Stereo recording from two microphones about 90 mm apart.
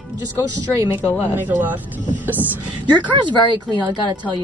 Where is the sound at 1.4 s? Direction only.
20° right (ahead or behind).